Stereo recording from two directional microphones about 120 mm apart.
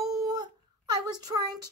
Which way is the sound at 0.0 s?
30° right (ahead or behind).